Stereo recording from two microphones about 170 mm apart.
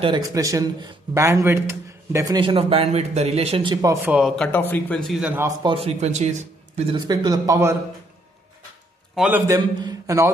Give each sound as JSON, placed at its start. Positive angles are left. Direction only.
{"t": 0.0, "sound": "speech", "side_deg": -25}
{"t": 4.4, "sound": "speech", "side_deg": 10}
{"t": 5.6, "sound": "a man's voice", "side_deg": -30}
{"t": 6.8, "sound": "speech", "side_deg": -30}
{"t": 9.1, "sound": "a man's voice", "side_deg": -5}
{"t": 9.5, "sound": "a man's voice", "side_deg": -20}